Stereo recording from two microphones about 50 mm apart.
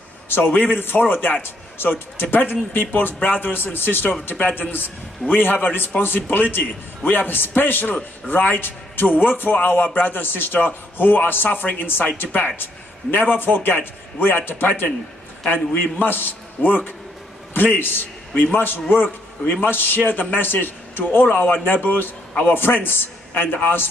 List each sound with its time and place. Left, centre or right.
0.3 s a man's voice: left